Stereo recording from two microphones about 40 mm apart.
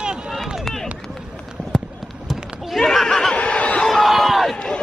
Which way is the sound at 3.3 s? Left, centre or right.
Left.